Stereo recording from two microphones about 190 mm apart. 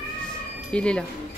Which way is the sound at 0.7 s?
5° left (ahead or behind).